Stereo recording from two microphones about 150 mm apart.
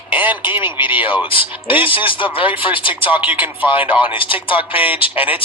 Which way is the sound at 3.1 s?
10° right (ahead or behind).